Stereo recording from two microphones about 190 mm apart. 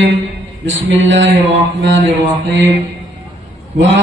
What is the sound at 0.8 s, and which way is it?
A man's voice, 80° right.